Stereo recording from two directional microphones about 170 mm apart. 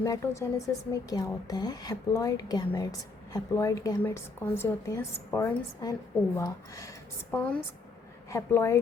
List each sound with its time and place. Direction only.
0.0 s a woman's voice: 20° left (ahead or behind)